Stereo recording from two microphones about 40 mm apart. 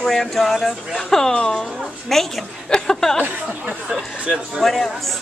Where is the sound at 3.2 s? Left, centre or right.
Right.